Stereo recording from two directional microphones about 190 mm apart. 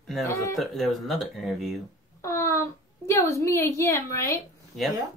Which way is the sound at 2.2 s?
15° left (ahead or behind).